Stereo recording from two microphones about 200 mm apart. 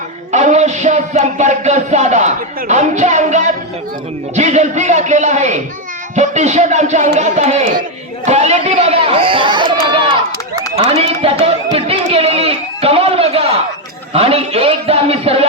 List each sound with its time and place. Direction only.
0.3 s music: 35° right (ahead or behind)
4.4 s a man's voice: 35° right (ahead or behind)
10.8 s a sound: 30° right (ahead or behind)
14.1 s a man's voice: 30° right (ahead or behind)